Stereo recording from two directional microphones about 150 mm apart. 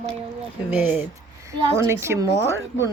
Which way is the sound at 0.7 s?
10° right (ahead or behind).